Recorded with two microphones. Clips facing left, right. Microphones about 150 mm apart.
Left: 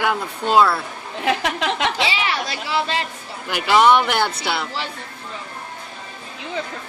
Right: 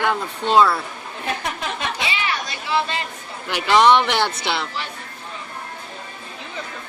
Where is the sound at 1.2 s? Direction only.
90° left.